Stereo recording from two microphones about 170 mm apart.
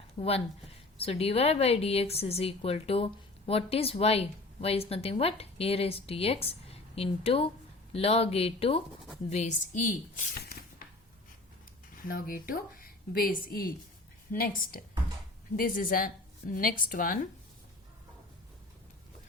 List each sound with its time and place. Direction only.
0.2 s a woman's voice: 35° left (ahead or behind); by 10.8 s 60° left (ahead or behind)
12.0 s a woman's voice: 60° left (ahead or behind)